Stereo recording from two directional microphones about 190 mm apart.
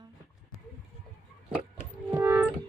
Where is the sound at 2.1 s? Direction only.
10° right (ahead or behind).